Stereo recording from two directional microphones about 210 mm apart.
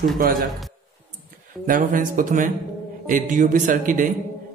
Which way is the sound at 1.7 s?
40° right (ahead or behind).